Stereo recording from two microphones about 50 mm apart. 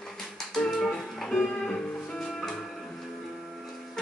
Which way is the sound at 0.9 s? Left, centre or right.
Centre.